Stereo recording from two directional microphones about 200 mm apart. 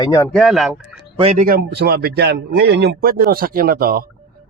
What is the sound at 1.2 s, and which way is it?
A man's voice, 35° right (ahead or behind).